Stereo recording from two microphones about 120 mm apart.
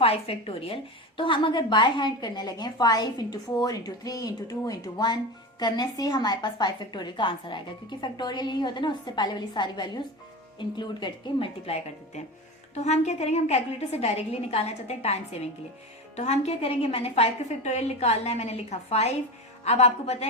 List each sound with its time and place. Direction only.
0.0 s a woman's voice: 50° left (ahead or behind)
12.7 s a woman's voice: 70° left (ahead or behind)